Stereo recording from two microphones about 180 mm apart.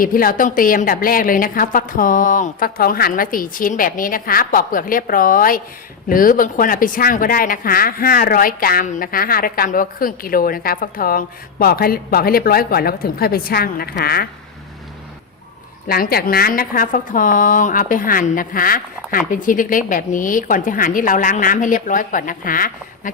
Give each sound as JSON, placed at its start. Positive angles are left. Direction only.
{"t": 0.0, "sound": "speech", "side_deg": 50}
{"t": 15.9, "sound": "speech", "side_deg": 60}